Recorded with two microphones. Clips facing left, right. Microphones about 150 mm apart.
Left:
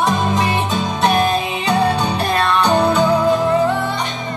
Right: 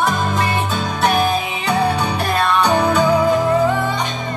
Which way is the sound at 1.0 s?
5° right (ahead or behind).